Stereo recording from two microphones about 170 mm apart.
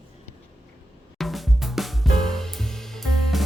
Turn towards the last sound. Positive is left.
turn(degrees=0)  # may be behind; listen again after turning